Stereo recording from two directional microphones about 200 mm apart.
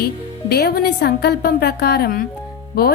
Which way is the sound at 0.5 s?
50° left (ahead or behind).